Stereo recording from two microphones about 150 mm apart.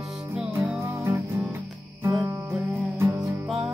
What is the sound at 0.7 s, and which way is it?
Music, 15° right (ahead or behind).